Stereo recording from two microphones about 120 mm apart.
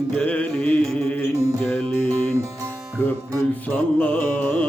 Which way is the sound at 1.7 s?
15° left (ahead or behind).